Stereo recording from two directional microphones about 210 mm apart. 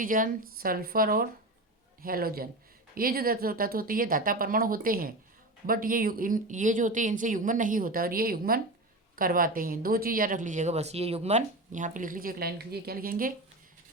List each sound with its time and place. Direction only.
0.0 s speech: 40° right (ahead or behind)